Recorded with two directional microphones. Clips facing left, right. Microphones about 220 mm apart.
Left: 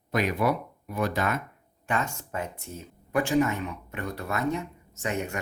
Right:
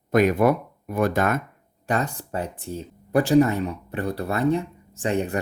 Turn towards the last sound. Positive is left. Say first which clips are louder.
# right 6 dB
turn(degrees=-30)  # may be behind; listen again after turning